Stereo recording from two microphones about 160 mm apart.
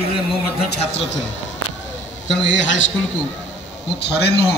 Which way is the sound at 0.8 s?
40° left (ahead or behind).